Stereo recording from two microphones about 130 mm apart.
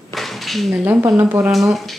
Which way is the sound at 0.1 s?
Centre (ahead or behind).